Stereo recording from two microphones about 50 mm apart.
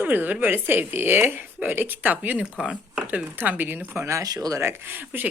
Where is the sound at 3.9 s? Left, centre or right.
Right.